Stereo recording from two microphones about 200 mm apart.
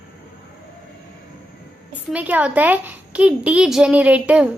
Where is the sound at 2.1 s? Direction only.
5° right (ahead or behind).